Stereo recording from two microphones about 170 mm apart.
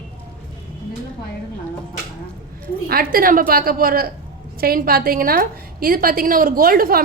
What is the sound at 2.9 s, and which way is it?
A woman's voice, 60° right (ahead or behind).